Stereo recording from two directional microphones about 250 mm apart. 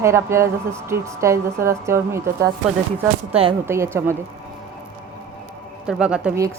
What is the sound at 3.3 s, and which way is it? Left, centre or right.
Speech, right.